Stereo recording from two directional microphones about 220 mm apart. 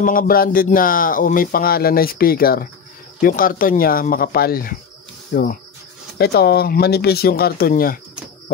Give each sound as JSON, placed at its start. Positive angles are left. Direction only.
{"t": 0.0, "sound": "speech", "side_deg": 40}